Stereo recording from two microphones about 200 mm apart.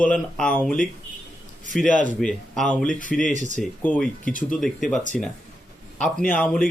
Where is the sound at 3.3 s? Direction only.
40° right (ahead or behind).